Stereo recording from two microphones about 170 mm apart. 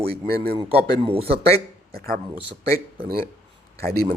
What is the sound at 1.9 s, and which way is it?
Speech, 60° right (ahead or behind).